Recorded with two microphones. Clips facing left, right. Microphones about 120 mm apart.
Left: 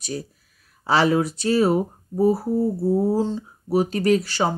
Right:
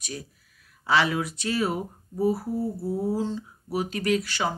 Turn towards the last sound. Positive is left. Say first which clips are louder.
# left 6 dB
turn(degrees=35)  # may be behind; listen again after turning